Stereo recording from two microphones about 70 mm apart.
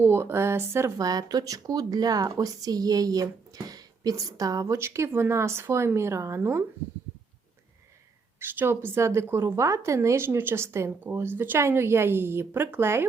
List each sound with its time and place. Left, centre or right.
0.0 s speech: right
0.9 s speech: right
4.8 s speech: right
8.4 s a woman's voice: right
10.2 s speech: right